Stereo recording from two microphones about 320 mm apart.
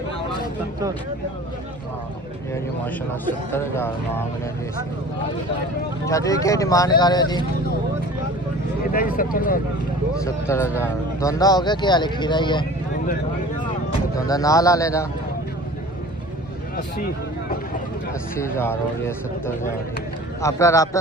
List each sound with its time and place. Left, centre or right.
2.5 s speech: centre
6.1 s speech: centre
9.1 s speech: left
10.2 s speech: centre
14.2 s speech: centre
18.3 s speech: centre
20.4 s speech: centre